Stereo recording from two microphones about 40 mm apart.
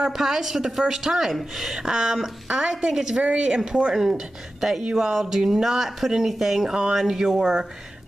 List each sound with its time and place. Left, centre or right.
0.0 s speech: centre; by 3.9 s right
3.9 s speech: centre